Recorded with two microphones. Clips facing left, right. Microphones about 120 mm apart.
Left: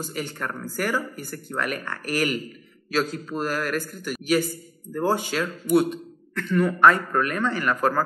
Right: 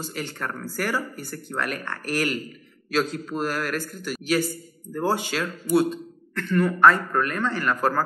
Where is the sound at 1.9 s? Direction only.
10° left (ahead or behind).